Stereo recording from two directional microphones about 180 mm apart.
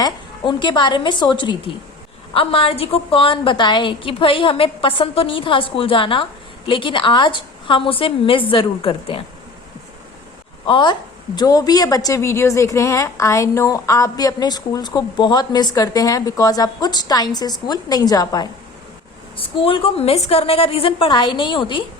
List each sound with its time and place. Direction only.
0.0 s a woman's voice: 25° left (ahead or behind)
10.7 s a woman's voice: 25° left (ahead or behind)